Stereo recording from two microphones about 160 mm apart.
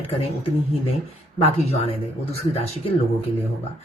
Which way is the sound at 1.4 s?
40° left (ahead or behind).